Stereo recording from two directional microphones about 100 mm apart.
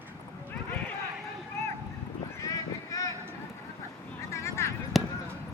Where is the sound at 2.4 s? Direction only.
35° left (ahead or behind).